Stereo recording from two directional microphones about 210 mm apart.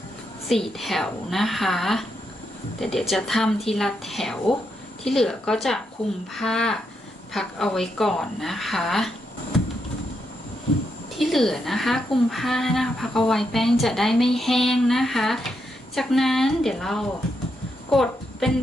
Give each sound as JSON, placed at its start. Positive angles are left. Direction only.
{"t": 0.4, "sound": "speech", "side_deg": 0}
{"t": 11.2, "sound": "a woman's voice", "side_deg": 0}